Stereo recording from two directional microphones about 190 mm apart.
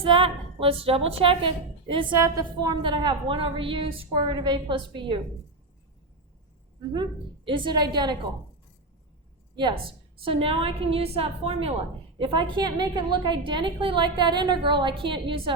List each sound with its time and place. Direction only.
0.0 s a woman's voice: 30° right (ahead or behind)
6.9 s a woman's voice: 25° right (ahead or behind)
9.6 s a woman's voice: 25° right (ahead or behind)